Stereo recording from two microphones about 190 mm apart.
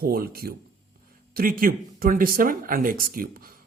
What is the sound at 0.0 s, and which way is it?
Speech, 55° right (ahead or behind).